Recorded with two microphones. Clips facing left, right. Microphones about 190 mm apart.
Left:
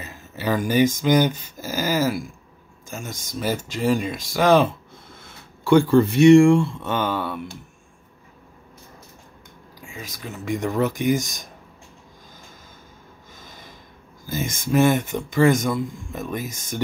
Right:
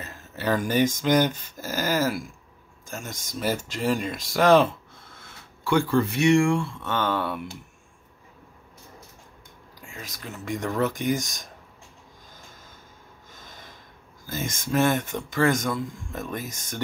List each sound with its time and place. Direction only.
0.0 s speech: 5° left (ahead or behind)
5.6 s speech: 25° left (ahead or behind); by 7.4 s centre (ahead or behind)
9.8 s speech: centre (ahead or behind)
14.2 s speech: 10° left (ahead or behind)